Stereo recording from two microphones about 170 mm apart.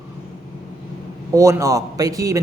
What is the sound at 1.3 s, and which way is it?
A man's voice, 15° right (ahead or behind).